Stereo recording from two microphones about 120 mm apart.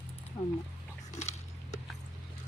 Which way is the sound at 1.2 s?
70° left (ahead or behind).